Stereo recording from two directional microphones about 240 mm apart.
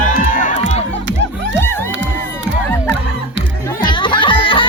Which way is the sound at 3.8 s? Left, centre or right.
Left.